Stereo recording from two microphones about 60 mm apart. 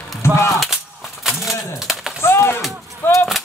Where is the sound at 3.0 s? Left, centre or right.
Left.